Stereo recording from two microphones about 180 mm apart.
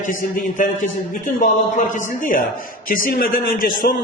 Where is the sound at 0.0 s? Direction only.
50° left (ahead or behind).